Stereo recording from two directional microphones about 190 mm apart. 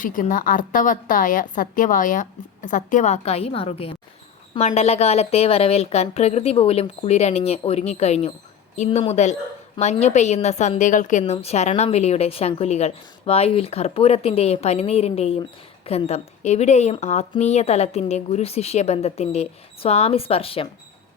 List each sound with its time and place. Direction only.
0.0 s a woman's voice: 45° left (ahead or behind)